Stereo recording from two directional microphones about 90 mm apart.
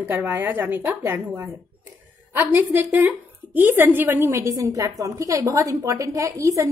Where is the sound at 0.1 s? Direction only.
20° right (ahead or behind).